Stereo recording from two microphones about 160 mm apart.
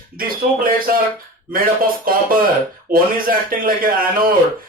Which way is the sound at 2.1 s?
65° right (ahead or behind).